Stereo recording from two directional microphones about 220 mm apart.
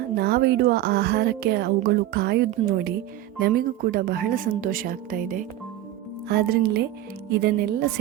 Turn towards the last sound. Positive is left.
turn(degrees=-45)  # may be behind; listen again after turning